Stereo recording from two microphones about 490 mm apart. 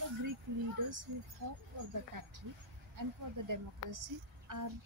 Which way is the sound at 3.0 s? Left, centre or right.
Right.